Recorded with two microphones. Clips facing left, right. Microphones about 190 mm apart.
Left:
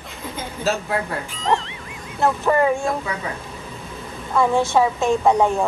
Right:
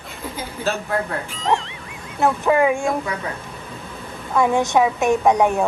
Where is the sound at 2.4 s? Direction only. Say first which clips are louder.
Right 1 dB; 15° right (ahead or behind).